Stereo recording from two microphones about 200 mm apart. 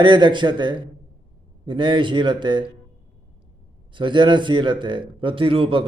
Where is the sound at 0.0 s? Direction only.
20° right (ahead or behind).